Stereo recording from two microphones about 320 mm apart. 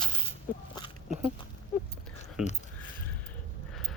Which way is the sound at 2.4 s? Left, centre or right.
Centre.